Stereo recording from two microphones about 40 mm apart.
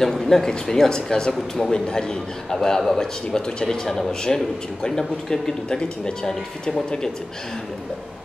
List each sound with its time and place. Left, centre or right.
0.0 s speech: centre
3.3 s speech: centre